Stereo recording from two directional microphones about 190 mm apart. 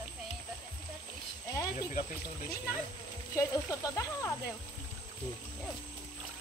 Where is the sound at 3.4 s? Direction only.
15° left (ahead or behind).